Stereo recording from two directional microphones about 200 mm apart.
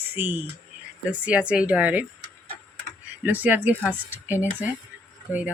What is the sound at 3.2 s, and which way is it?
Speech, 10° right (ahead or behind).